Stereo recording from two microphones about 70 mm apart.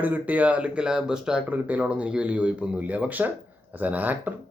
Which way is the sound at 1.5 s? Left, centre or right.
Right.